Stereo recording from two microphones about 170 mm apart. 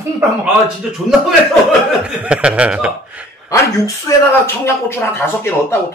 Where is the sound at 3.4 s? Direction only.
20° left (ahead or behind).